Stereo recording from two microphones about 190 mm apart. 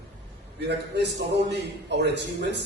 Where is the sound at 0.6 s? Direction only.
65° right (ahead or behind).